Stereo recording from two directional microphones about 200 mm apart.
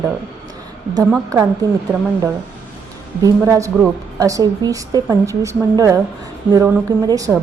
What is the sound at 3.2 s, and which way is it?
A woman's voice, 15° right (ahead or behind).